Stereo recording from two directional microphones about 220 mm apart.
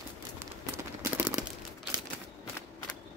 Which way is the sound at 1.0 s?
10° right (ahead or behind).